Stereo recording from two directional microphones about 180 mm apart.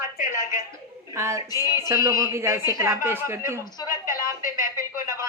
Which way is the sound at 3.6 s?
20° left (ahead or behind).